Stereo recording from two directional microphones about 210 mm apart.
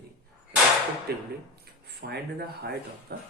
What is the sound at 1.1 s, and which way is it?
Speech, 50° right (ahead or behind).